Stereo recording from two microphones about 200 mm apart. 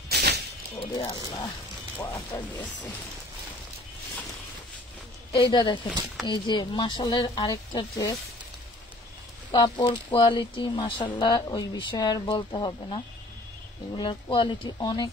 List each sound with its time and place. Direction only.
0.1 s a sound: 55° right (ahead or behind)
0.9 s speech: 20° left (ahead or behind)
5.3 s speech: 25° left (ahead or behind)
9.5 s speech: 20° left (ahead or behind)